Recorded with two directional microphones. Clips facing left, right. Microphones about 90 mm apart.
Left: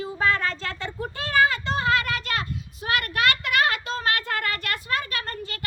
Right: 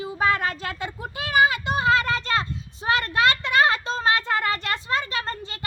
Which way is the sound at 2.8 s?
25° right (ahead or behind).